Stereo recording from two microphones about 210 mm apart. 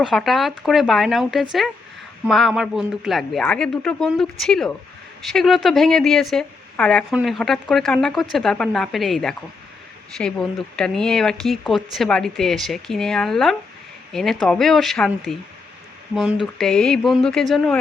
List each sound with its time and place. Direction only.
0.0 s speech: centre (ahead or behind)